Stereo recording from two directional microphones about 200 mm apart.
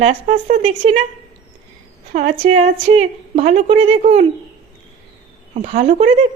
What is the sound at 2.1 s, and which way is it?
A woman's voice, 35° right (ahead or behind).